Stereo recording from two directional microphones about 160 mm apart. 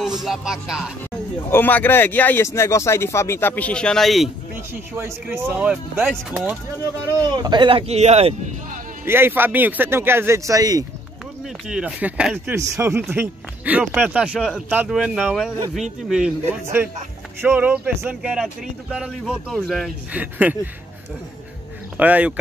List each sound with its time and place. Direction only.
0.2 s speech: centre (ahead or behind)
1.5 s speech: 10° left (ahead or behind)
4.9 s speech: 15° right (ahead or behind)
7.2 s speech: 25° right (ahead or behind)
9.0 s speech: 15° right (ahead or behind)
11.4 s speech: 5° right (ahead or behind)
12.5 s speech: 20° right (ahead or behind)
21.9 s speech: 10° right (ahead or behind)